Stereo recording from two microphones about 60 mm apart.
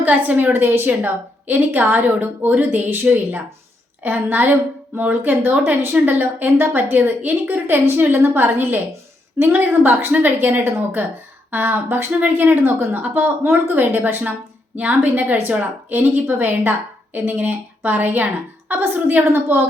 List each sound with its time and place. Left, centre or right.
0.0 s a woman's voice: right